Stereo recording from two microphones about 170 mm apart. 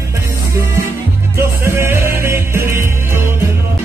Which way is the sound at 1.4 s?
15° right (ahead or behind).